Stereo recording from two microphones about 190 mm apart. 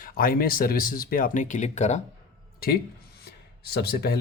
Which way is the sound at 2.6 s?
55° left (ahead or behind).